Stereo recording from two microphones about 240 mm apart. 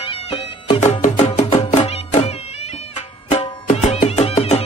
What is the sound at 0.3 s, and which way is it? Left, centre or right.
Music, left.